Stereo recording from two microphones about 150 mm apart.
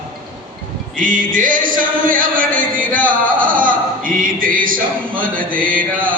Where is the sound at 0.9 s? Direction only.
65° right (ahead or behind).